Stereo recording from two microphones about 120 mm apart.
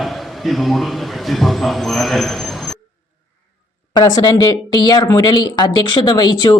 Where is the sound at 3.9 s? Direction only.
30° left (ahead or behind).